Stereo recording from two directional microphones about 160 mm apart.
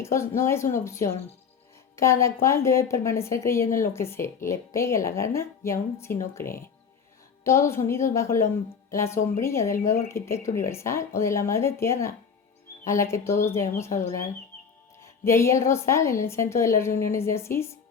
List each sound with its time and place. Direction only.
0.0 s a woman's voice: 15° left (ahead or behind)